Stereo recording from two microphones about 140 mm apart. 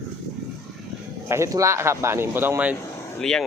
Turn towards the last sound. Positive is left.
turn(degrees=5)  # may be behind; listen again after turning